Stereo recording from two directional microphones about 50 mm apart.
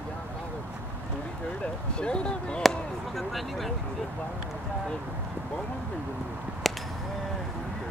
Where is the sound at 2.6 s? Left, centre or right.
Centre.